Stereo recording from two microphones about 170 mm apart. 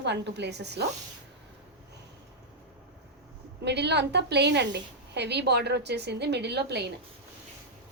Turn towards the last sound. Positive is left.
turn(degrees=-80)